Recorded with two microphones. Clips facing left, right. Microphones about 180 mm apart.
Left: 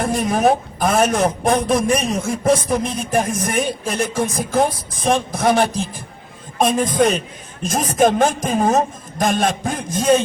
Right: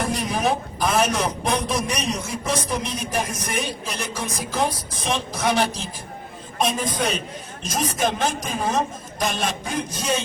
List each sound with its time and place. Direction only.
0.0 s a man's voice: 50° left (ahead or behind)